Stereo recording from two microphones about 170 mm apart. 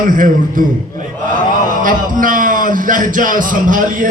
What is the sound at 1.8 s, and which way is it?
A man's voice, 50° right (ahead or behind).